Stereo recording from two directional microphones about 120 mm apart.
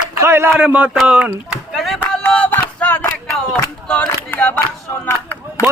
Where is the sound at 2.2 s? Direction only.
15° left (ahead or behind).